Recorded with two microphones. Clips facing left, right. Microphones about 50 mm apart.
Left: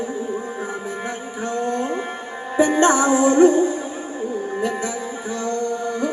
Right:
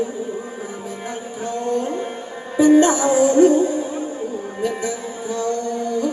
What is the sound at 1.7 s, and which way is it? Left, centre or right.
Music, centre.